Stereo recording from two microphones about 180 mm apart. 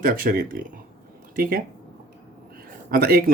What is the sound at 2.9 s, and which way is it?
Speech, 60° right (ahead or behind).